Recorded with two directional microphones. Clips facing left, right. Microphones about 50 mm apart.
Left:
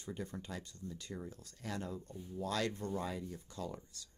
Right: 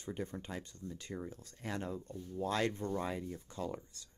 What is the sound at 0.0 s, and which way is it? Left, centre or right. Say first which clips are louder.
Speech: right 2 dB; right.